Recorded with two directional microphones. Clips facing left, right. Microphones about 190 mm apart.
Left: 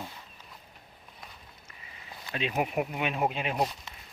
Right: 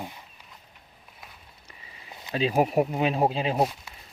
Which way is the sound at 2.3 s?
35° right (ahead or behind).